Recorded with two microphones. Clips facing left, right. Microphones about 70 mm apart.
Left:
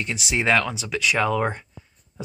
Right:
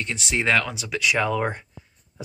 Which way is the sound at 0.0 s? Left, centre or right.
Centre.